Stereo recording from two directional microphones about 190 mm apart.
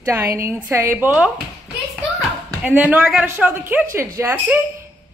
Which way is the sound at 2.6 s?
10° right (ahead or behind).